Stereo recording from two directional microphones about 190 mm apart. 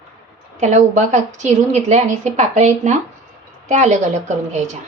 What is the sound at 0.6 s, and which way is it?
A woman's voice, 40° right (ahead or behind).